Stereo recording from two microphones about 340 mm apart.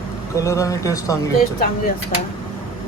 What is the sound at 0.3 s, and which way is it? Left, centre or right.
Speech, centre.